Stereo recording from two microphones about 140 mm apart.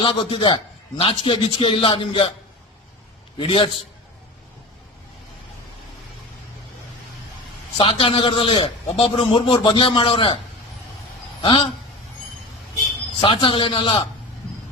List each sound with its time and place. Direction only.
0.0 s a man's voice: 40° left (ahead or behind)
3.3 s a man's voice: 40° left (ahead or behind)
7.8 s a man's voice: 40° left (ahead or behind)
11.4 s a man's voice: 35° left (ahead or behind)
13.1 s a man's voice: 35° left (ahead or behind)